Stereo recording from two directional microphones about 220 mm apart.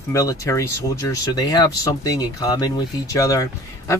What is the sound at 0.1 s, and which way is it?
Speech, 15° left (ahead or behind).